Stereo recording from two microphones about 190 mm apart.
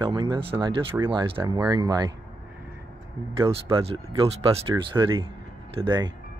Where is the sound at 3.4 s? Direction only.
30° right (ahead or behind).